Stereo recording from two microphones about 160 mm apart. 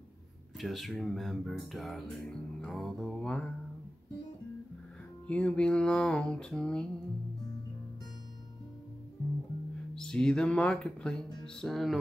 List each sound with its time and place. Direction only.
0.6 s speech: centre (ahead or behind)
5.2 s speech: 5° left (ahead or behind)
9.9 s speech: 5° left (ahead or behind)